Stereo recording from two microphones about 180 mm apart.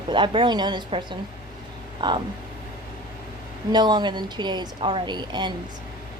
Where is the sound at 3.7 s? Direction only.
25° right (ahead or behind).